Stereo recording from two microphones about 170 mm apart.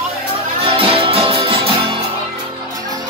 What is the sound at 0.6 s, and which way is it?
Music, 30° right (ahead or behind).